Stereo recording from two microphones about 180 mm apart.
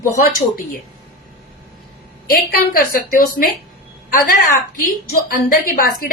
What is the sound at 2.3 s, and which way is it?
A woman's voice, 55° left (ahead or behind).